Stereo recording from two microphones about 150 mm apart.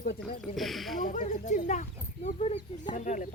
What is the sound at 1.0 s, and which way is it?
Speech, 55° left (ahead or behind).